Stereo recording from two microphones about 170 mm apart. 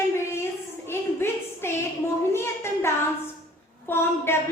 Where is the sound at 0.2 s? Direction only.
15° left (ahead or behind).